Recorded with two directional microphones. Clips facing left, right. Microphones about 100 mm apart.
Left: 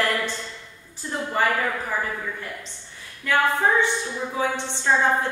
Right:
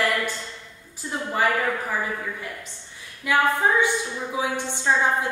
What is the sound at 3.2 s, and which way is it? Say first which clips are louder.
A woman's voice: even; 10° right (ahead or behind).